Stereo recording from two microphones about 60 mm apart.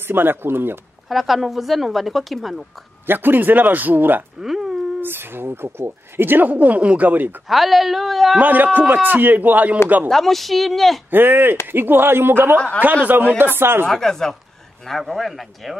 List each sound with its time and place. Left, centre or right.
0.0 s speech: right
1.0 s speech: centre
3.1 s speech: right
4.4 s a sound: centre
5.0 s speech: right
7.4 s speech: centre
8.4 s speech: right
10.0 s speech: centre
11.1 s speech: right
12.5 s speech: centre
12.8 s speech: right
13.8 s speech: centre